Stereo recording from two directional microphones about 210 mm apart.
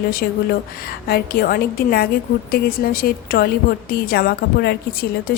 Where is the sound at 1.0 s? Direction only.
50° left (ahead or behind).